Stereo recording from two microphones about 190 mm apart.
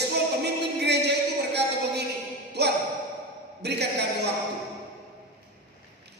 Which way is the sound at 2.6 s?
60° right (ahead or behind).